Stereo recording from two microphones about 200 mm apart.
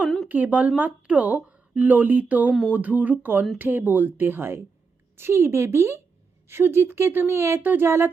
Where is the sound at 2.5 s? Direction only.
5° left (ahead or behind).